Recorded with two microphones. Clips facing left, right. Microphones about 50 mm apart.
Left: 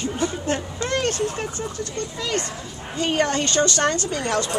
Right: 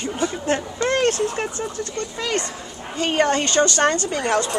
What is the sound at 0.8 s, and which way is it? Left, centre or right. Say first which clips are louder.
Speech: right 4 dB; right.